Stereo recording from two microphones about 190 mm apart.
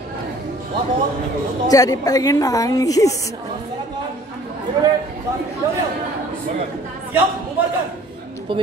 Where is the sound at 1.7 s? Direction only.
20° left (ahead or behind).